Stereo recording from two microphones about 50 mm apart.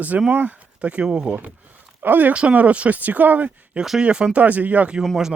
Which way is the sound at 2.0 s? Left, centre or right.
Right.